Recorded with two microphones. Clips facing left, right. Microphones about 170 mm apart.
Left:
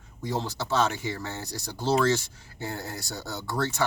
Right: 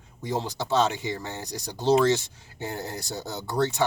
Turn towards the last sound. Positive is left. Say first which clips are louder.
# right 3 dB
turn(degrees=-15)  # may be behind; listen again after turning